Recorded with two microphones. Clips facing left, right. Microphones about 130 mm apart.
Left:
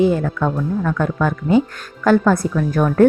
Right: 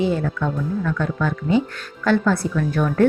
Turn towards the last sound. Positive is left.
turn(degrees=45)  # may be behind; listen again after turning